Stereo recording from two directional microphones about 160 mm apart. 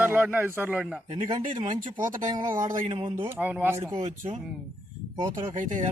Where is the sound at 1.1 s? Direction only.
30° right (ahead or behind).